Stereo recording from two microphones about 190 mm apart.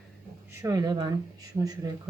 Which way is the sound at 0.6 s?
20° right (ahead or behind).